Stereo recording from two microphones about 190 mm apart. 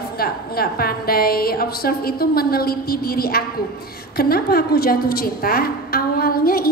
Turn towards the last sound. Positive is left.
turn(degrees=50)  # may be behind; listen again after turning